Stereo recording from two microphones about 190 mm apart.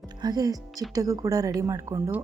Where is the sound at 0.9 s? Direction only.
20° right (ahead or behind).